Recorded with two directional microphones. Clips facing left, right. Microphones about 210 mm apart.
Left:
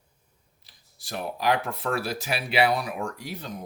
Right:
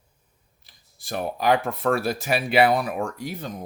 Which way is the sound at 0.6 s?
50° right (ahead or behind).